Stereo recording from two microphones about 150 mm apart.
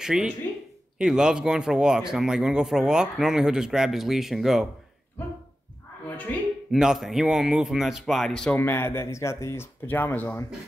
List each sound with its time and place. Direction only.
0.0 s speech: 5° right (ahead or behind)
5.2 s speech: 15° left (ahead or behind)
6.7 s speech: centre (ahead or behind)
8.5 s speech: 15° left (ahead or behind)